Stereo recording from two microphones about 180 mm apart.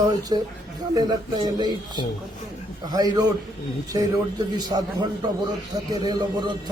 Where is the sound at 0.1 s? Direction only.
20° right (ahead or behind).